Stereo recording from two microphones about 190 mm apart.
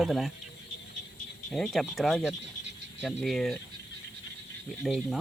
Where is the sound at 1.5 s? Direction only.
Centre (ahead or behind).